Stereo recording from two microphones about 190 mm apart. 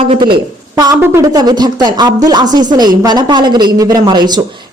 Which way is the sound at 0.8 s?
15° right (ahead or behind).